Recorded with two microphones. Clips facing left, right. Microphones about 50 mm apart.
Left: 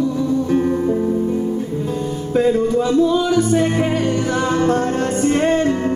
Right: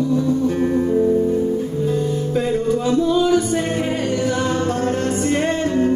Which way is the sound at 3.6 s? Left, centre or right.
Centre.